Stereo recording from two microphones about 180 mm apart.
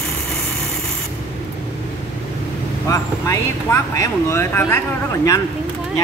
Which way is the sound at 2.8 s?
15° left (ahead or behind).